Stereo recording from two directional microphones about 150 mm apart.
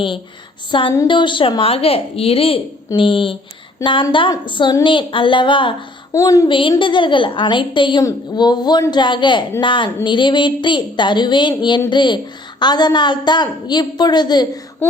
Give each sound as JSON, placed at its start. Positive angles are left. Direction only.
{"t": 0.7, "sound": "a woman's voice", "side_deg": 35}
{"t": 6.1, "sound": "a woman's voice", "side_deg": 20}
{"t": 6.5, "sound": "a woman's voice", "side_deg": 35}